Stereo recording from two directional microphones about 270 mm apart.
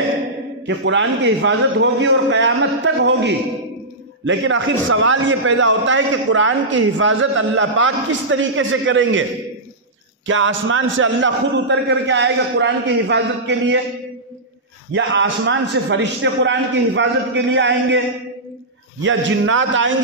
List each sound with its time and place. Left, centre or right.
0.7 s a man's voice: right
10.2 s a man's voice: right
14.9 s a man's voice: right
19.0 s a man's voice: right